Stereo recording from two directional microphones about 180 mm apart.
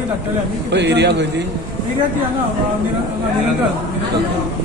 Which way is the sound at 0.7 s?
70° right (ahead or behind).